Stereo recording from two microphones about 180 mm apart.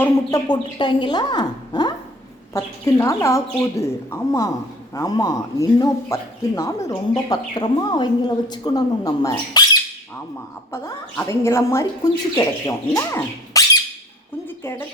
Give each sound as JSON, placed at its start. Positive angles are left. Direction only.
{"t": 0.0, "sound": "a woman's voice", "side_deg": 20}
{"t": 10.7, "sound": "a woman's voice", "side_deg": 15}